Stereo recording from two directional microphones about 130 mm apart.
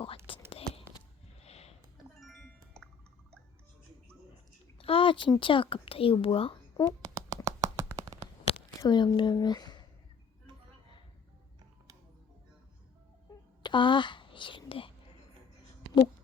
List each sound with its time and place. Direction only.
0.5 s whispering: 45° left (ahead or behind)
1.5 s a sound: 55° left (ahead or behind)
2.2 s music: centre (ahead or behind)
4.8 s a sound: 45° left (ahead or behind)
5.4 s speech: 40° left (ahead or behind)
6.8 s a sound: 30° right (ahead or behind)
8.8 s a woman's voice: 30° left (ahead or behind)
13.6 s speech: 35° left (ahead or behind)
14.7 s whispering: 45° left (ahead or behind)